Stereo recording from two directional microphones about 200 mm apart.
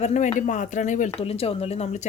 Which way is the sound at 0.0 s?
35° left (ahead or behind).